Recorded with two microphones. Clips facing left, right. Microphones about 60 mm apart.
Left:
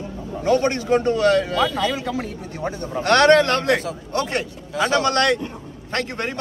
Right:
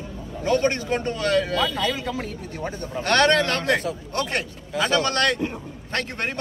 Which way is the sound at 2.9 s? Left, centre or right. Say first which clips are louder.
Left 5 dB; left.